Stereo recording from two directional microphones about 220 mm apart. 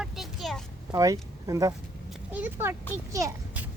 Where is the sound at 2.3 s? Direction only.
10° right (ahead or behind).